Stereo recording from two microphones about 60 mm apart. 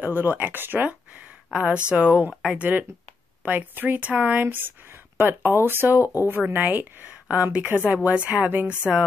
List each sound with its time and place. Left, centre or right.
0.0 s speech: right
1.5 s speech: centre